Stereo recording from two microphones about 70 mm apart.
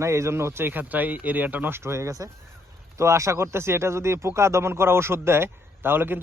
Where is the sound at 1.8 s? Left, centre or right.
Right.